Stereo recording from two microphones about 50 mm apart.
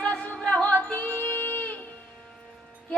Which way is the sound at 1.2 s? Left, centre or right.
Left.